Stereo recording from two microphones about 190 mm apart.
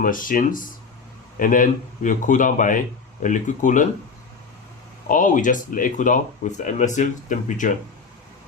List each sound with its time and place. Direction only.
0.0 s speech: 45° left (ahead or behind)
5.0 s speech: 45° left (ahead or behind)